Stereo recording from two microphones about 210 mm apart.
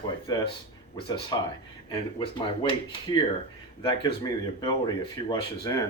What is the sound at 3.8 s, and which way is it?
Speech, 20° left (ahead or behind).